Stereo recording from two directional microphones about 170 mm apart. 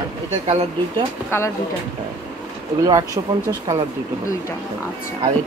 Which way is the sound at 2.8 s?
20° right (ahead or behind).